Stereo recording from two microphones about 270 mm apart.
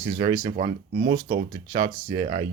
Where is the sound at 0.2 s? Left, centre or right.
Right.